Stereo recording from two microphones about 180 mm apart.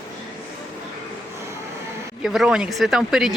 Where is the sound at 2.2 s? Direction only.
Centre (ahead or behind).